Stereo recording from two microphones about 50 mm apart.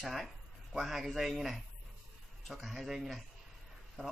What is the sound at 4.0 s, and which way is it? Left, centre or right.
Speech, centre.